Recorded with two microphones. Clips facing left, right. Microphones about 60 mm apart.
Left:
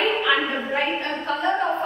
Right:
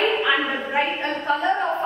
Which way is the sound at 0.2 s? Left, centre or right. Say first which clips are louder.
Even; centre.